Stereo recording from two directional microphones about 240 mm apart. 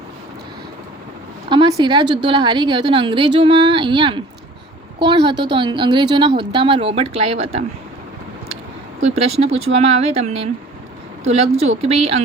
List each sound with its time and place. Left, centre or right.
1.5 s a woman's voice: centre
9.0 s a woman's voice: right